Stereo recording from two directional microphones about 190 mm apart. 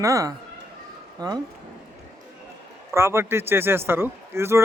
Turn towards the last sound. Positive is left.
turn(degrees=-15)  # may be behind; listen again after turning